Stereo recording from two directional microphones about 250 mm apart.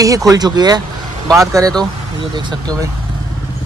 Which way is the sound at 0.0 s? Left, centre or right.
Centre.